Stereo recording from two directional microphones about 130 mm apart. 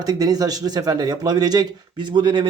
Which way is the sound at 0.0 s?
30° right (ahead or behind).